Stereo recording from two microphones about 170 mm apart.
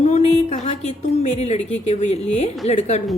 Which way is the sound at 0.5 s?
40° left (ahead or behind).